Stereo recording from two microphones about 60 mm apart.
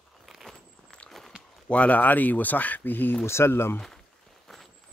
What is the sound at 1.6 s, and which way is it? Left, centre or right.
Speech, left.